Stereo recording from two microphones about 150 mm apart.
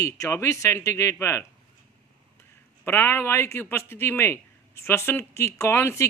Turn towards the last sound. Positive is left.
turn(degrees=15)  # may be behind; listen again after turning